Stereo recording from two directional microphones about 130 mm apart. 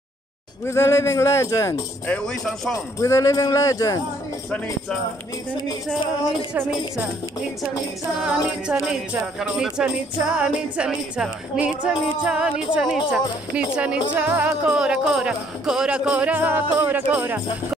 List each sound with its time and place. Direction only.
0.7 s speech: 20° left (ahead or behind)
2.0 s music: 5° left (ahead or behind)
3.0 s speech: 25° left (ahead or behind)
8.2 s speech: 5° right (ahead or behind)